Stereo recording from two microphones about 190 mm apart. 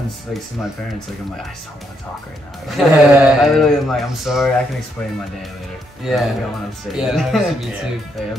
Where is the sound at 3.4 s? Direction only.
Centre (ahead or behind).